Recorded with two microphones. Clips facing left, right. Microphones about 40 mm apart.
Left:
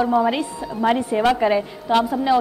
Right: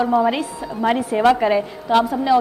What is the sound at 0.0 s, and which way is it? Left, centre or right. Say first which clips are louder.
A woman's voice: right 1 dB; centre.